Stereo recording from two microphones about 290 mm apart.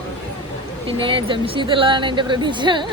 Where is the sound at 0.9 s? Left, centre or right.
Centre.